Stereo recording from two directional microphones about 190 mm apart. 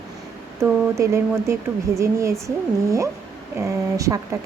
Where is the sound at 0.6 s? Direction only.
15° right (ahead or behind).